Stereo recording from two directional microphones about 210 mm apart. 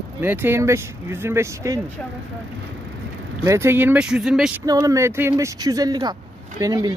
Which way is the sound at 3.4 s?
10° right (ahead or behind).